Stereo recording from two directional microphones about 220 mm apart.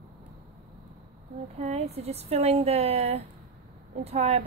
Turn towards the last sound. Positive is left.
turn(degrees=-30)  # may be behind; listen again after turning